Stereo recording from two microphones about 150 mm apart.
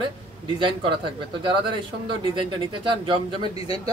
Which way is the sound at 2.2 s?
35° right (ahead or behind).